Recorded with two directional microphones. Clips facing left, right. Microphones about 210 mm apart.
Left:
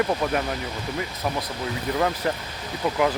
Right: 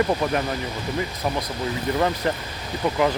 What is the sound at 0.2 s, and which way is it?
Speech, 5° left (ahead or behind).